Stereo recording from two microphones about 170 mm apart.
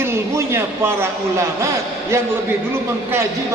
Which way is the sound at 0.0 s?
15° right (ahead or behind).